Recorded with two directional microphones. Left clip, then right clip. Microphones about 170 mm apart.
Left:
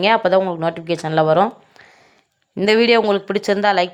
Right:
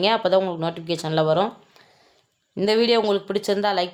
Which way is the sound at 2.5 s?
20° left (ahead or behind).